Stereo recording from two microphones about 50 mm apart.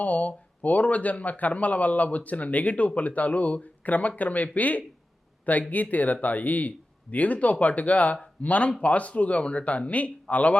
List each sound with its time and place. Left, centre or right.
0.0 s a man's voice: left